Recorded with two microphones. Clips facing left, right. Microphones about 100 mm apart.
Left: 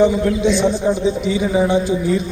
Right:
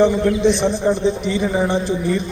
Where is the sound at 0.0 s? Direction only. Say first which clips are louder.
Even; 5° left (ahead or behind).